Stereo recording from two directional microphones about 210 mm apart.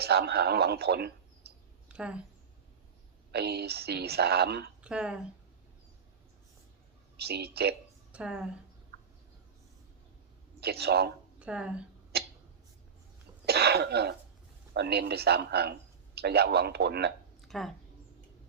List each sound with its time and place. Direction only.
0.0 s speech: 50° right (ahead or behind)
1.9 s a woman's voice: 5° right (ahead or behind)
3.3 s a woman's voice: 50° right (ahead or behind)
4.8 s speech: 5° right (ahead or behind)
7.2 s a woman's voice: 50° right (ahead or behind)
8.1 s speech: 5° right (ahead or behind)
10.6 s a woman's voice: 50° right (ahead or behind)
11.3 s speech: 5° right (ahead or behind)
12.1 s tick-tock: 50° right (ahead or behind)
13.4 s a woman's voice: 50° right (ahead or behind)
17.5 s a woman's voice: centre (ahead or behind)